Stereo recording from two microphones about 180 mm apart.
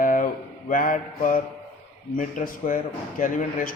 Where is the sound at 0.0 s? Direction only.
50° left (ahead or behind).